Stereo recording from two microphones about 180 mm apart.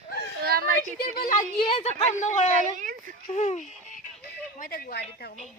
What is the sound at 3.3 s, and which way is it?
A woman's voice, 40° left (ahead or behind).